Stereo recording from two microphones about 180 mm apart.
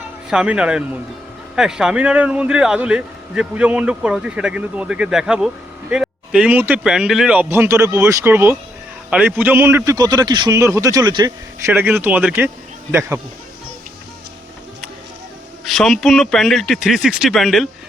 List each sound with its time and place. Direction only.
0.3 s a man's voice: 5° right (ahead or behind); by 11.7 s 25° right (ahead or behind)
11.7 s speech: 10° right (ahead or behind)
15.6 s a man's voice: centre (ahead or behind)